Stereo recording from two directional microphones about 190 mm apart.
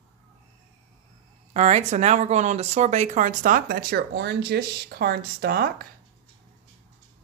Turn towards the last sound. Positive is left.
turn(degrees=-55)  # may be behind; listen again after turning